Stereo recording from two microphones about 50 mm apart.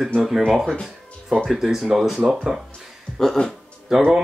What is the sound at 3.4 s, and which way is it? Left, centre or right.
Speech, left.